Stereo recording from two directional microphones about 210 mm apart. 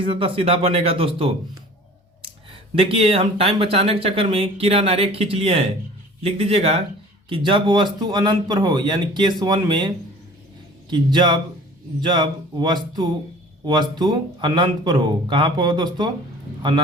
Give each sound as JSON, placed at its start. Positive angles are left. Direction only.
{"t": 0.0, "sound": "speech", "side_deg": -25}
{"t": 2.7, "sound": "speech", "side_deg": -25}